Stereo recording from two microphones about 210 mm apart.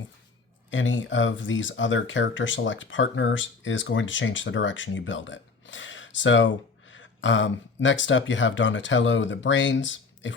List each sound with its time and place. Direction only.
0.7 s speech: 65° left (ahead or behind)